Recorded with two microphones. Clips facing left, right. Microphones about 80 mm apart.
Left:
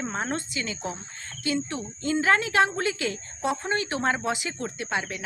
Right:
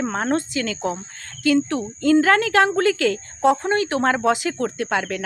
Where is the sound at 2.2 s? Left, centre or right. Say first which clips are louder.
Right 3 dB; right.